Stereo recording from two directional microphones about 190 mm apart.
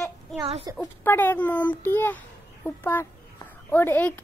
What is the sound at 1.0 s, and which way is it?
Speech, 10° left (ahead or behind).